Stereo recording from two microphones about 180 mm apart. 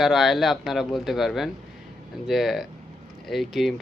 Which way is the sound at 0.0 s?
Centre (ahead or behind).